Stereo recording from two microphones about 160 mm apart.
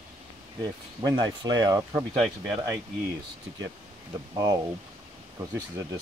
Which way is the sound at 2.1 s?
5° right (ahead or behind).